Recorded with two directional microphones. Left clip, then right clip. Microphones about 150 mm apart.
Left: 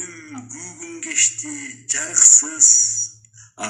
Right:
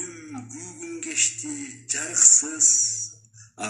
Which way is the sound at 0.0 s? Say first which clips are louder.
Left 3 dB; 35° left (ahead or behind).